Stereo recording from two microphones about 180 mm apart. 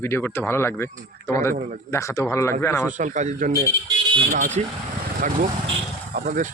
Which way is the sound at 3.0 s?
40° right (ahead or behind).